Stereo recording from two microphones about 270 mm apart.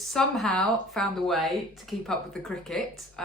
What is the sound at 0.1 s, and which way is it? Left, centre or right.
Speech, centre.